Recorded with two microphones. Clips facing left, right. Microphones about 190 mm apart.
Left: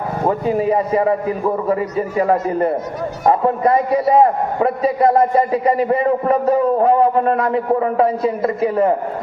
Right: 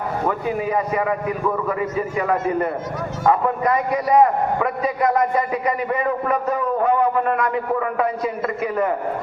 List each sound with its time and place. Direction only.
0.3 s a man's voice: 30° left (ahead or behind)